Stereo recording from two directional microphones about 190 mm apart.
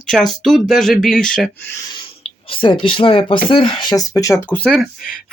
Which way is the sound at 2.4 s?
25° left (ahead or behind).